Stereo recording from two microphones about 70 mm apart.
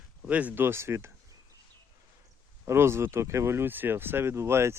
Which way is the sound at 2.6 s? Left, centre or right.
Right.